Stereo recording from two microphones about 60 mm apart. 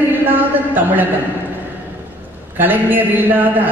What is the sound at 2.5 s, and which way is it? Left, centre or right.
A man's voice, right.